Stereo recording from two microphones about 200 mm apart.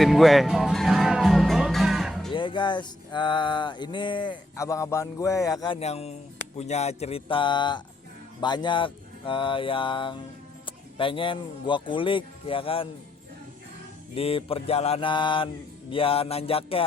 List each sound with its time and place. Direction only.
0.0 s music: centre (ahead or behind)
2.3 s music: 25° left (ahead or behind)
14.2 s music: 30° left (ahead or behind)